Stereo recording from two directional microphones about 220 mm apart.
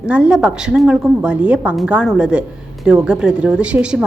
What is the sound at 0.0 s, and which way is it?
A woman's voice, 5° right (ahead or behind).